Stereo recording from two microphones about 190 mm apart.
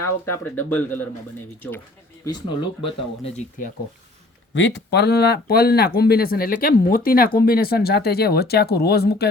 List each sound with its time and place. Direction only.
0.3 s speech: 10° left (ahead or behind)
2.2 s speech: 25° left (ahead or behind)
4.5 s speech: 70° left (ahead or behind)